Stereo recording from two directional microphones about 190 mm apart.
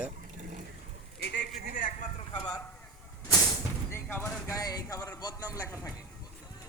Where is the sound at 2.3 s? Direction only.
20° left (ahead or behind).